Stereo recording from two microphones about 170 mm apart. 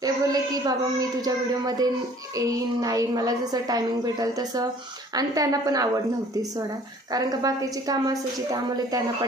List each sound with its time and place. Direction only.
0.0 s a woman's voice: 20° right (ahead or behind)
7.1 s a woman's voice: 20° right (ahead or behind)